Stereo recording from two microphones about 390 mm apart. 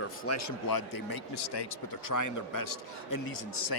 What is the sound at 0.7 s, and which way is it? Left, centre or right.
Speech, left.